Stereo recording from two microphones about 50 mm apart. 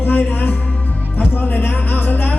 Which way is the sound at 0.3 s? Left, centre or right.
Left.